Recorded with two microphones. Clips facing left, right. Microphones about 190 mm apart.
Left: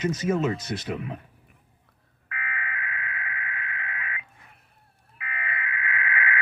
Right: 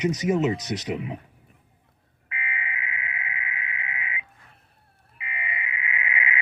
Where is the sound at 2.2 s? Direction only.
20° right (ahead or behind).